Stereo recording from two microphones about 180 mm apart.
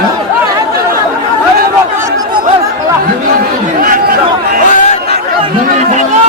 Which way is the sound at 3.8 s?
50° right (ahead or behind).